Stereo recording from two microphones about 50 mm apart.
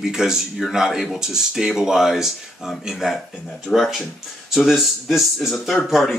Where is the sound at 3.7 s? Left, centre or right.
Centre.